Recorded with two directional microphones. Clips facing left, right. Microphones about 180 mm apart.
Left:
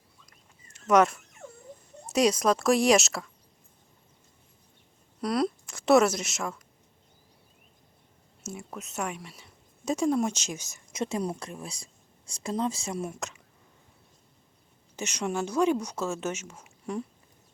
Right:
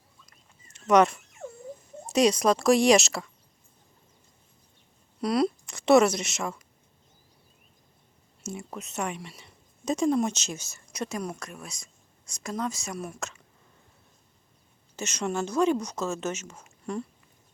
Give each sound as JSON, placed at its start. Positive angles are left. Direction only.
{"t": 0.7, "sound": "dog", "side_deg": 5}
{"t": 2.1, "sound": "speech", "side_deg": 5}
{"t": 5.2, "sound": "speech", "side_deg": 0}
{"t": 8.4, "sound": "speech", "side_deg": 5}
{"t": 14.9, "sound": "speech", "side_deg": 15}